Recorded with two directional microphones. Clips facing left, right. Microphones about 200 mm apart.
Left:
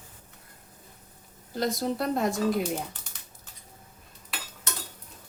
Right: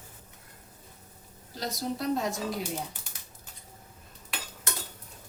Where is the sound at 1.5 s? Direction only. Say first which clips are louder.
Left 5 dB; 55° left (ahead or behind).